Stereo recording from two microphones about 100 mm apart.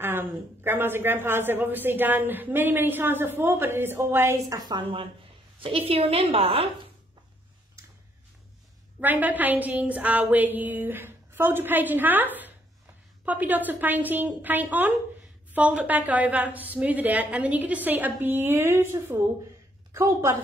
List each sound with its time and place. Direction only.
0.0 s a man's voice: 20° right (ahead or behind); by 5.0 s 50° right (ahead or behind)
5.6 s a woman's voice: 70° right (ahead or behind)
9.0 s a woman's voice: 15° right (ahead or behind)